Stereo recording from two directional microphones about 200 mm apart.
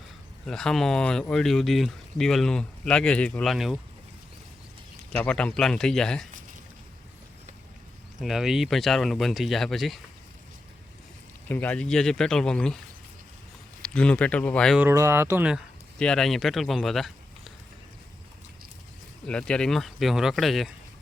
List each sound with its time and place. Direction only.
0.4 s speech: centre (ahead or behind)
5.1 s speech: 5° left (ahead or behind)
8.2 s speech: centre (ahead or behind)
11.4 s speech: 10° left (ahead or behind)
13.8 s speech: 5° left (ahead or behind)
14.8 s speech: 15° right (ahead or behind)
19.2 s speech: 5° left (ahead or behind)